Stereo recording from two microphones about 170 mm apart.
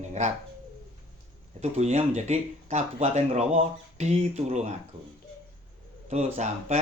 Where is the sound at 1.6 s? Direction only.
40° right (ahead or behind).